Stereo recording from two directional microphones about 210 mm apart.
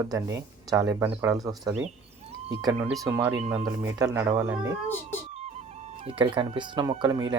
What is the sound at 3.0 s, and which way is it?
Speech, 10° right (ahead or behind).